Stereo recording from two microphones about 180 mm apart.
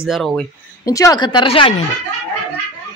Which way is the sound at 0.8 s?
20° left (ahead or behind).